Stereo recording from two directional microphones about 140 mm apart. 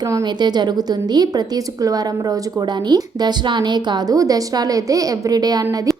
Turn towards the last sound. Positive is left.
turn(degrees=-30)  # may be behind; listen again after turning